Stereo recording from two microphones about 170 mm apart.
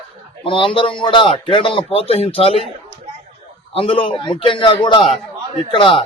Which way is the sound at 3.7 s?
30° left (ahead or behind).